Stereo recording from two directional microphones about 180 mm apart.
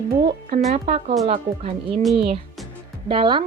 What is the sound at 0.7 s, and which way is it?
Speech, 35° right (ahead or behind).